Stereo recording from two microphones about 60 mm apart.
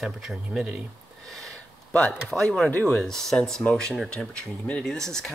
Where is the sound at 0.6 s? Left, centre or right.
Right.